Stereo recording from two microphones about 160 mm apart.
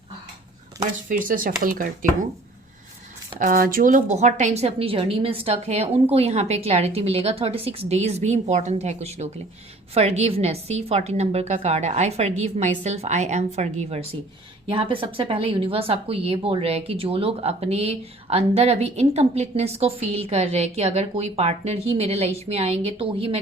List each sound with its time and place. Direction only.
0.8 s speech: 60° right (ahead or behind)
3.3 s a woman's voice: 60° right (ahead or behind); by 23.4 s 35° right (ahead or behind)